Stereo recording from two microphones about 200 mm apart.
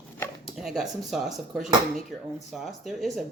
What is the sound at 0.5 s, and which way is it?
Speech, centre (ahead or behind).